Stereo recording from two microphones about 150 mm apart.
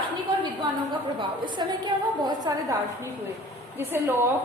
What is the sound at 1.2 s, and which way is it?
A woman's voice, 30° right (ahead or behind).